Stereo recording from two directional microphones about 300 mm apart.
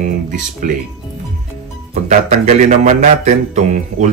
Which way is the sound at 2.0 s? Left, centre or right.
Right.